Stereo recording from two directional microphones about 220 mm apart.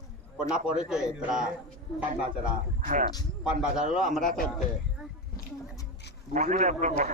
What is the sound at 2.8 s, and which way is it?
Speech, 35° right (ahead or behind).